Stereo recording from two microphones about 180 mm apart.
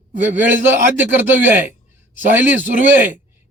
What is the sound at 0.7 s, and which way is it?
A man's voice, 10° right (ahead or behind).